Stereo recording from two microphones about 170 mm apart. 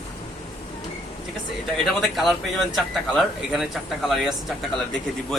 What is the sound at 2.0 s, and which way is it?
A man's voice, centre (ahead or behind).